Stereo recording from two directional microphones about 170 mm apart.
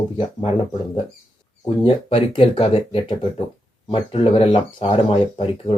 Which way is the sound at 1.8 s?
35° left (ahead or behind).